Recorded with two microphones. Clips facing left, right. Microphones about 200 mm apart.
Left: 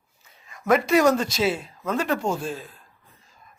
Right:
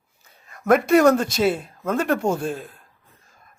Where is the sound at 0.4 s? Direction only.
55° right (ahead or behind).